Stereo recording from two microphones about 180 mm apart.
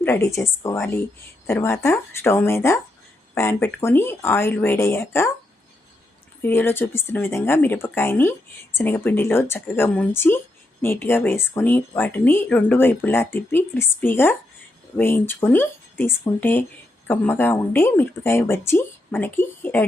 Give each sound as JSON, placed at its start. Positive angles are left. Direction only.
{"t": 0.0, "sound": "speech", "side_deg": 15}
{"t": 6.4, "sound": "speech", "side_deg": 10}